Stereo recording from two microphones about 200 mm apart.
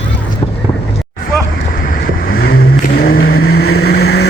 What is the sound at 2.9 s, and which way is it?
Vehicle, 50° left (ahead or behind).